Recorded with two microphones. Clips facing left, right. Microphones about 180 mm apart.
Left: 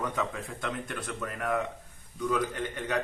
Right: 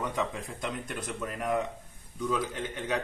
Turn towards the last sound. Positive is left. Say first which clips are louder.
# left 1 dB
turn(degrees=-10)  # may be behind; listen again after turning